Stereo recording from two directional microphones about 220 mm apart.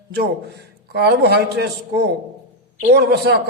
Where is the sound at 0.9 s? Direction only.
50° right (ahead or behind).